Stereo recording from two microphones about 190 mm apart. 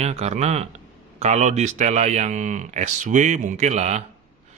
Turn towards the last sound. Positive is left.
turn(degrees=-35)  # may be behind; listen again after turning